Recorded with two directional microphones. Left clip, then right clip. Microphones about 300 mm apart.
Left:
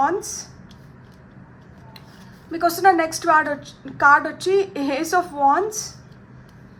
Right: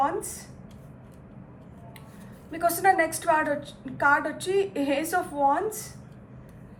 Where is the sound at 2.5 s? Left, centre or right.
Centre.